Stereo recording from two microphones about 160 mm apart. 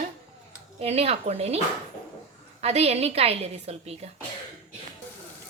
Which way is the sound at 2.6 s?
40° right (ahead or behind).